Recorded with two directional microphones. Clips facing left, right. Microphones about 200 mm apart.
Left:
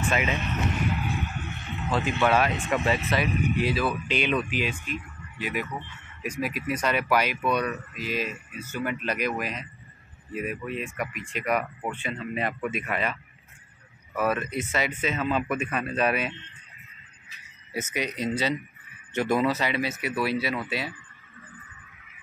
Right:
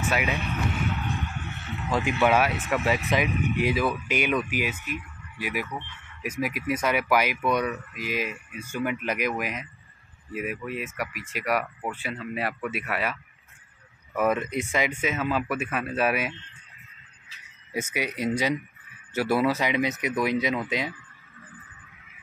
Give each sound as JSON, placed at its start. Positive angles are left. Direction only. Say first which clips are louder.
{"t": 0.0, "sound": "speech", "louder": "even", "side_deg": -10}
{"t": 0.9, "sound": "a sound", "louder": "left 1 dB", "side_deg": 10}
{"t": 1.9, "sound": "speech", "louder": "right 1 dB", "side_deg": -15}
{"t": 17.7, "sound": "speech", "louder": "right 1 dB", "side_deg": -10}